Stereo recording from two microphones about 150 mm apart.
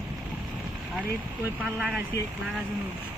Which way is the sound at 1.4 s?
5° right (ahead or behind).